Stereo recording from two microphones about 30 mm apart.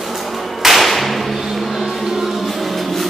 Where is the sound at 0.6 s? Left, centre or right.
Centre.